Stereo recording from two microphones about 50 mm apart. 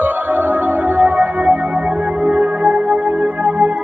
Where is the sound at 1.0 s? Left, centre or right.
Right.